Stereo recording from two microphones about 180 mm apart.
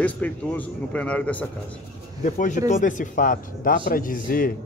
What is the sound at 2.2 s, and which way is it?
A man's voice, 45° left (ahead or behind).